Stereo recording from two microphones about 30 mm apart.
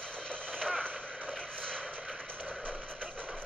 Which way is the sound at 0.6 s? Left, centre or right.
Left.